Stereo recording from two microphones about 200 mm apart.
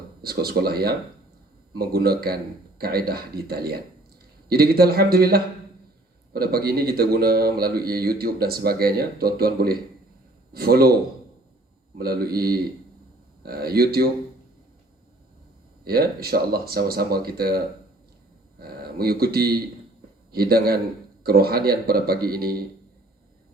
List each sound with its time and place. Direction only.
0.2 s a man's voice: 50° right (ahead or behind)
11.9 s a man's voice: 50° right (ahead or behind)
15.8 s a man's voice: 50° right (ahead or behind)
18.6 s a man's voice: 50° right (ahead or behind)